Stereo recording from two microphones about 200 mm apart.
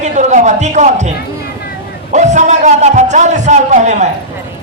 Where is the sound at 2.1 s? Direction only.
35° right (ahead or behind).